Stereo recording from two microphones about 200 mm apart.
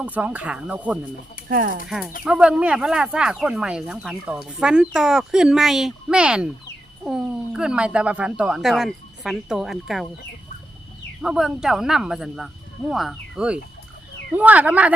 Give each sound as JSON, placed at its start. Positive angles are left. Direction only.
{"t": 0.0, "sound": "speech", "side_deg": -5}
{"t": 1.5, "sound": "speech", "side_deg": -45}
{"t": 1.9, "sound": "speech", "side_deg": 0}
{"t": 11.2, "sound": "speech", "side_deg": 0}